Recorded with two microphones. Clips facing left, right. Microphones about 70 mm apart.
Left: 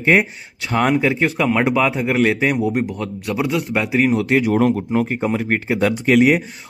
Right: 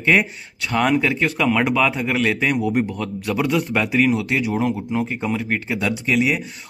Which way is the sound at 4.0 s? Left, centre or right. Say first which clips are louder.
Left 4 dB; left.